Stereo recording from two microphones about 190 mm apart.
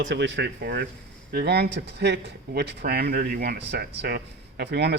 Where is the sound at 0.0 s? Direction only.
75° right (ahead or behind).